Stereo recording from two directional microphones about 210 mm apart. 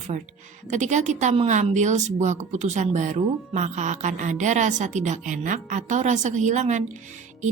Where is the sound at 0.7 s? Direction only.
35° right (ahead or behind).